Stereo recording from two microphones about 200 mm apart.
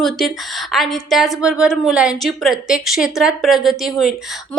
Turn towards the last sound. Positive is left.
turn(degrees=0)  # may be behind; listen again after turning